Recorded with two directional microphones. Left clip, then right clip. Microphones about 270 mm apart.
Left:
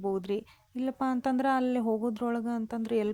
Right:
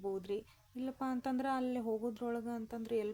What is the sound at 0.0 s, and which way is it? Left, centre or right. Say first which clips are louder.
Speech: left 8 dB; left.